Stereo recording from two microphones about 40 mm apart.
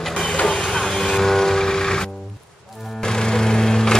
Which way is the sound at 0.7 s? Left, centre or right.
Centre.